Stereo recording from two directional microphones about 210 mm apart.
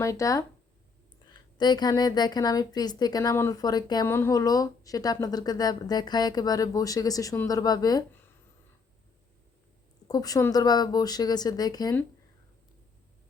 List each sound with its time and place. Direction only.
0.0 s a woman's voice: 15° left (ahead or behind)
10.1 s a woman's voice: 15° left (ahead or behind)